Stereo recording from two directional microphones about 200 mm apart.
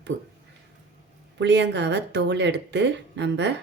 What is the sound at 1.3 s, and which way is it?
Speech, 60° right (ahead or behind).